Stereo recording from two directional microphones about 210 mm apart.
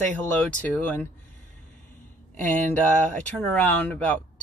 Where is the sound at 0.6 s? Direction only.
5° left (ahead or behind).